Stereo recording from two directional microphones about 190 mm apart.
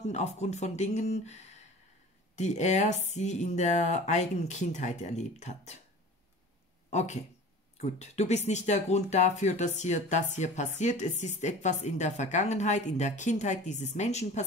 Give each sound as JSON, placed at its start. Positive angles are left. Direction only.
{"t": 0.0, "sound": "speech", "side_deg": 35}
{"t": 6.9, "sound": "speech", "side_deg": 35}